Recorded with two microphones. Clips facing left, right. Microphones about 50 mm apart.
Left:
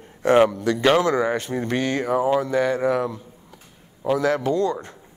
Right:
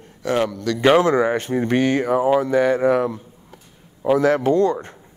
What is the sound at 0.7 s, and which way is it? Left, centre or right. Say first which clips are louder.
Speech: right 4 dB; centre.